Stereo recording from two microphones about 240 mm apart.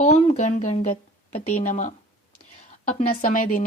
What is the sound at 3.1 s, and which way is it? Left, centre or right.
Speech, left.